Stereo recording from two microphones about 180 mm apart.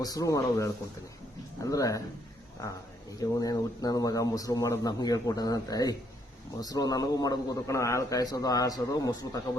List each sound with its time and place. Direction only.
0.0 s a man's voice: 20° left (ahead or behind)
3.2 s a man's voice: 20° left (ahead or behind)